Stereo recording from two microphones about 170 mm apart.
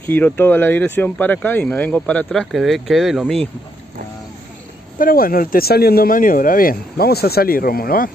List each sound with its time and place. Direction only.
0.0 s speech: 10° left (ahead or behind)
4.9 s speech: 55° left (ahead or behind)